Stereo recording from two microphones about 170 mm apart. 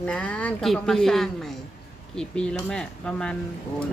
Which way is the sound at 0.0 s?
5° left (ahead or behind).